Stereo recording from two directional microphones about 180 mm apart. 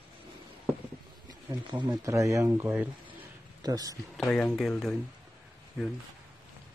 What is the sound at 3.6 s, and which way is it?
Speech, 20° right (ahead or behind).